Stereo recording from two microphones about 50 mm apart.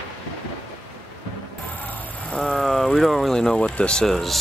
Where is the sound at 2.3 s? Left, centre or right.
Centre.